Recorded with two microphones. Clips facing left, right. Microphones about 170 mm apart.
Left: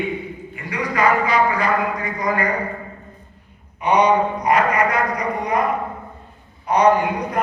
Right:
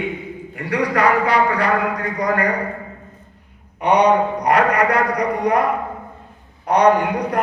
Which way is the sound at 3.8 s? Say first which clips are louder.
Right 1 dB; 70° right (ahead or behind).